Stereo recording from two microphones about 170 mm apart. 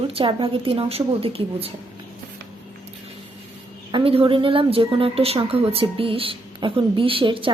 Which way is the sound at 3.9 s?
30° right (ahead or behind).